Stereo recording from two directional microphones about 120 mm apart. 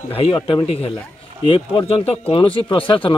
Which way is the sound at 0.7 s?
55° left (ahead or behind).